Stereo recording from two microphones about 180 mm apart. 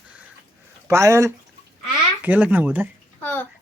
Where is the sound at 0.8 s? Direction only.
15° right (ahead or behind).